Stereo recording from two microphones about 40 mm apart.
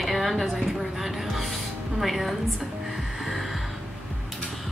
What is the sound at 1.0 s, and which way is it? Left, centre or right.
Music, centre.